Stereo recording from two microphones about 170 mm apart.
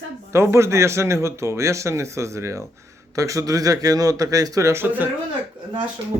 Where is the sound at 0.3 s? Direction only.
15° right (ahead or behind).